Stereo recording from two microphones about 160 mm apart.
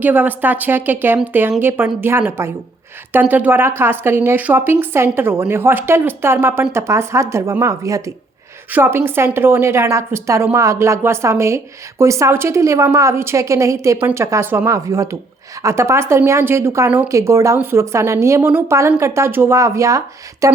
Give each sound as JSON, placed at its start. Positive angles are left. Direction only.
{"t": 0.0, "sound": "a woman's voice", "side_deg": -10}